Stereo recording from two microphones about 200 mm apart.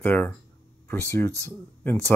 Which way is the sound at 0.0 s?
10° left (ahead or behind).